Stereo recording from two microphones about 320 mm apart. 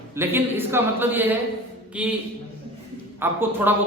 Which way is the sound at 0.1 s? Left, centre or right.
Centre.